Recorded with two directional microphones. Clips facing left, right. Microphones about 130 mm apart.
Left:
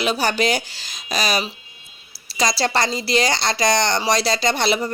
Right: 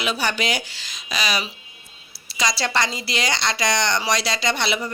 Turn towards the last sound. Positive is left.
turn(degrees=40)  # may be behind; listen again after turning